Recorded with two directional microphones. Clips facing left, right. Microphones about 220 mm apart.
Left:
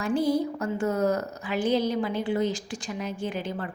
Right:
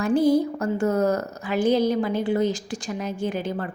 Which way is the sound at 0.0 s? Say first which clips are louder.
Right 5 dB; 45° right (ahead or behind).